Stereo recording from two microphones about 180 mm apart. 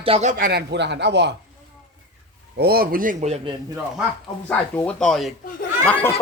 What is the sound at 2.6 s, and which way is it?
Speech, 60° right (ahead or behind).